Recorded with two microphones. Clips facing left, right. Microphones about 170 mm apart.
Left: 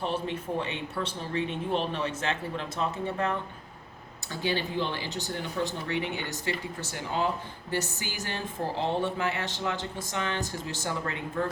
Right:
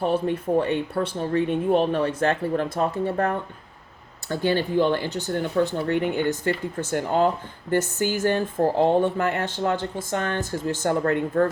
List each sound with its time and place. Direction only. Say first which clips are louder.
0.0 s speech: right 8 dB; 50° right (ahead or behind)